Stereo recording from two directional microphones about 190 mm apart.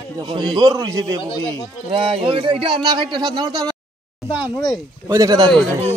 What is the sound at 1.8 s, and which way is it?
Speech, 30° right (ahead or behind).